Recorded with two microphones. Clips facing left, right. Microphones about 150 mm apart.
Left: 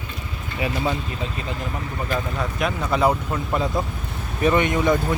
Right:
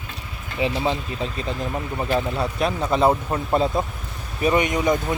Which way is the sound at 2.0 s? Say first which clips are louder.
Right 3 dB; 30° right (ahead or behind).